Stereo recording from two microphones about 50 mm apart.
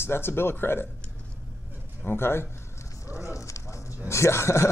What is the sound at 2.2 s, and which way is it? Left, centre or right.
Speech, left.